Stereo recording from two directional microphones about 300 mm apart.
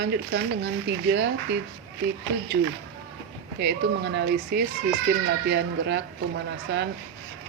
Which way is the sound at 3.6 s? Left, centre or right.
Right.